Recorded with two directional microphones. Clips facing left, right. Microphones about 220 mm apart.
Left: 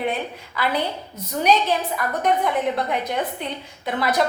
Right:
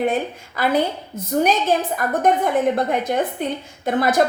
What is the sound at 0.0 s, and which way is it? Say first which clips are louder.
A woman's voice: right 5 dB; 45° right (ahead or behind).